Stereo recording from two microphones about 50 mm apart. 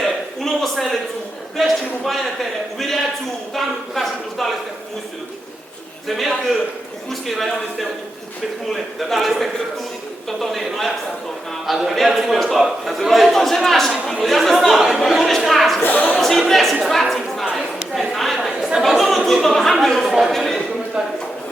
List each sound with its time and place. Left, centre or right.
0.0 s a sound: centre
1.5 s a man's voice: centre
6.1 s a man's voice: centre
15.8 s a woman's voice: left
16.1 s a man's voice: centre